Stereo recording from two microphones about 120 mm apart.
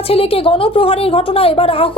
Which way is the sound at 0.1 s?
55° left (ahead or behind).